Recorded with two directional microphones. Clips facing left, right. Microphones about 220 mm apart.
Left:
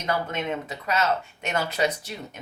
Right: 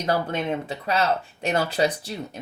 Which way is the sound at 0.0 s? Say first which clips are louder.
Right 3 dB; 35° right (ahead or behind).